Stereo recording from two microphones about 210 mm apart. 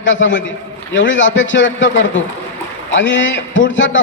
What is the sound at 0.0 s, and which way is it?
A man's voice, 65° left (ahead or behind).